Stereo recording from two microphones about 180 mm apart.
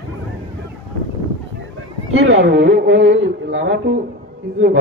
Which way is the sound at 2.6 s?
80° right.